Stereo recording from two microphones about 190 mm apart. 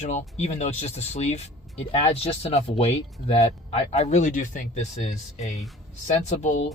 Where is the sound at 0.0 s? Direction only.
40° left (ahead or behind).